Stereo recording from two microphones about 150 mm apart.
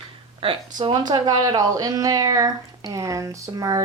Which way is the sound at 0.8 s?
30° right (ahead or behind).